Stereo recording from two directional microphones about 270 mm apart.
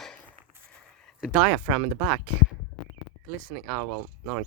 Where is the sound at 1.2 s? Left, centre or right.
Centre.